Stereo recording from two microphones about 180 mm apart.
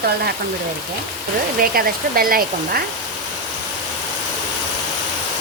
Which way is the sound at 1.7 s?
55° right (ahead or behind).